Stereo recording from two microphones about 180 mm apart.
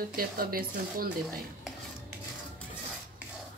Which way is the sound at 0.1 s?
55° right (ahead or behind).